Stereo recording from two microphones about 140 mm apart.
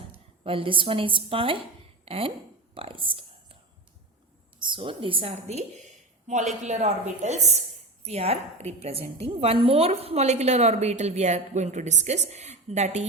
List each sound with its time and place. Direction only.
0.4 s a woman's voice: 40° right (ahead or behind)
2.7 s a sound: 40° right (ahead or behind)
4.6 s a woman's voice: 35° right (ahead or behind); by 13.1 s 55° right (ahead or behind)